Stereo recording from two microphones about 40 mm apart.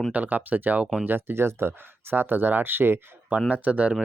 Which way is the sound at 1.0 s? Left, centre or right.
Right.